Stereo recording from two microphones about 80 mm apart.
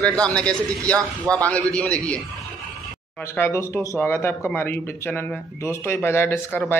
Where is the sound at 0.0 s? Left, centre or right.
Centre.